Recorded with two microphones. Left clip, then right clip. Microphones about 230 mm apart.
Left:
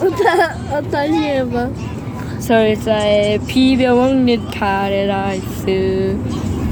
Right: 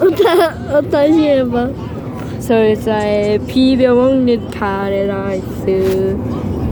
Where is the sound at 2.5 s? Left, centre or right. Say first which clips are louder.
Right 1 dB; centre.